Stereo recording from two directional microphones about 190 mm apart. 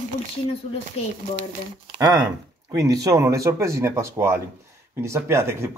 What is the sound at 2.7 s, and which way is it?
Speech, 15° right (ahead or behind).